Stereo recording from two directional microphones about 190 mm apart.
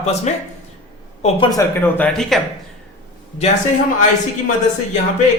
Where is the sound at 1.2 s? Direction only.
25° left (ahead or behind).